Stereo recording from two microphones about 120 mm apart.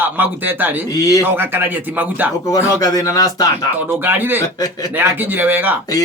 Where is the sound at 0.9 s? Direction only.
30° left (ahead or behind).